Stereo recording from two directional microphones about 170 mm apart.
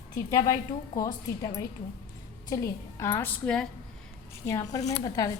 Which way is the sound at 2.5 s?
15° left (ahead or behind).